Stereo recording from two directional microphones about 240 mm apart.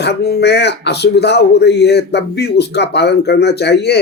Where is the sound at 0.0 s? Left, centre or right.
Left.